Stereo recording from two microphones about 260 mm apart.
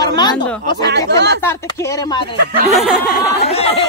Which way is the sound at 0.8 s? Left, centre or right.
Right.